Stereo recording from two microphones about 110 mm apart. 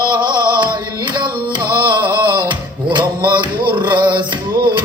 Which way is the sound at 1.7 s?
45° right (ahead or behind).